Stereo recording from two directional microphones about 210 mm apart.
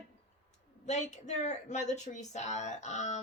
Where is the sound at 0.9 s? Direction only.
35° left (ahead or behind).